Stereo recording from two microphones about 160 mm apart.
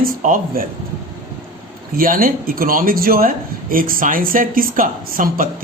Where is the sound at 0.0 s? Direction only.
60° right (ahead or behind).